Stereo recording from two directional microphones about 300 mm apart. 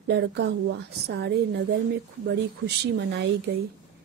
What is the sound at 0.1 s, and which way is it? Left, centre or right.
Speech, right.